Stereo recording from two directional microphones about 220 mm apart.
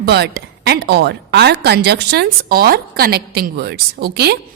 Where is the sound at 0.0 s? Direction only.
45° right (ahead or behind).